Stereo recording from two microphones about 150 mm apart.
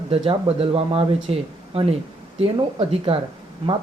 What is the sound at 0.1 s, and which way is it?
Speech, 40° right (ahead or behind).